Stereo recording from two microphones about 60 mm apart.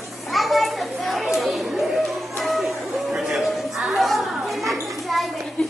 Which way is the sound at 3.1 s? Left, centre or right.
Centre.